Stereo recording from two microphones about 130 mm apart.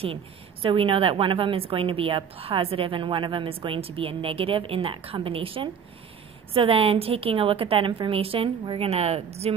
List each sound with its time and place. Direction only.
0.0 s a woman's voice: 45° right (ahead or behind)